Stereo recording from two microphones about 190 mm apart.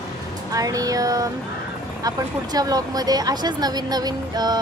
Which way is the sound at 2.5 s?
20° right (ahead or behind).